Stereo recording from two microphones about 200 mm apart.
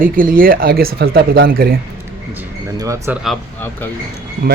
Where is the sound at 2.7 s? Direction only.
15° right (ahead or behind).